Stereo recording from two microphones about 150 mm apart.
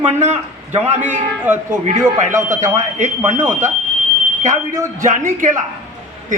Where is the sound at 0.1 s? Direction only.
50° right (ahead or behind).